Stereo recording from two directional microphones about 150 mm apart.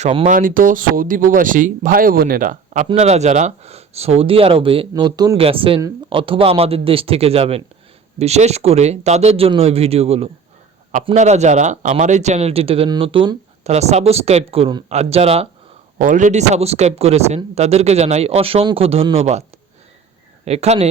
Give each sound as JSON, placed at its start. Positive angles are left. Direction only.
{"t": 0.3, "sound": "speech", "side_deg": -65}
{"t": 5.4, "sound": "a man's voice", "side_deg": -40}
{"t": 16.0, "sound": "speech", "side_deg": -60}